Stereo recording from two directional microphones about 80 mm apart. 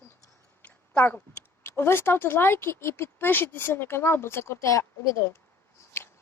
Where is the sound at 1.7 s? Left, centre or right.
Left.